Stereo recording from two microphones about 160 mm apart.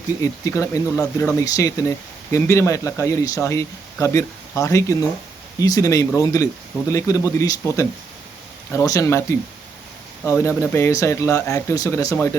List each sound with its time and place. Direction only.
0.2 s speech: 20° left (ahead or behind)
10.2 s speech: 15° left (ahead or behind)